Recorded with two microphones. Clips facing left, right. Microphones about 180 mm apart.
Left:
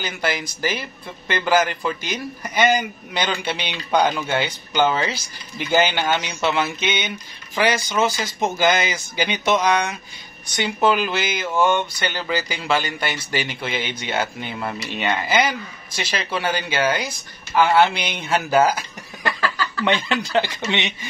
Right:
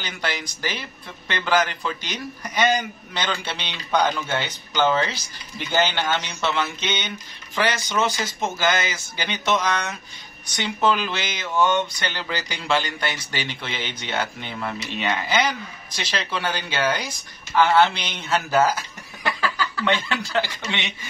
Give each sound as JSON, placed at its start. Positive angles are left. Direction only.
{"t": 0.0, "sound": "a man's voice", "side_deg": 5}
{"t": 19.2, "sound": "a sound", "side_deg": -10}
{"t": 19.8, "sound": "speech", "side_deg": 20}